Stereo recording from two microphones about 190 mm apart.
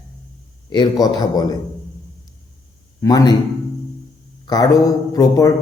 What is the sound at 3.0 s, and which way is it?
Speech, 20° left (ahead or behind).